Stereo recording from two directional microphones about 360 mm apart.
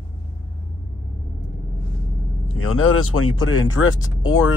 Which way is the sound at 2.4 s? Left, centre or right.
Left.